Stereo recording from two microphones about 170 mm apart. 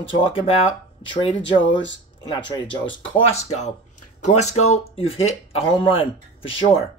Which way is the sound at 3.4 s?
40° left (ahead or behind).